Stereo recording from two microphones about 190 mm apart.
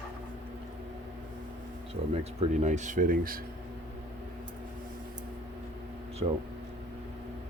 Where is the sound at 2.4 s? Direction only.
40° right (ahead or behind).